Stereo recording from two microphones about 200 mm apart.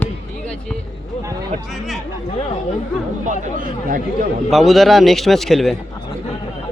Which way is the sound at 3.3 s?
45° right (ahead or behind).